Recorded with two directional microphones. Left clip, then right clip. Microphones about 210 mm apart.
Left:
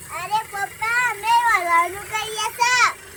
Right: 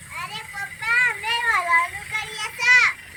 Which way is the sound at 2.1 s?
20° left (ahead or behind).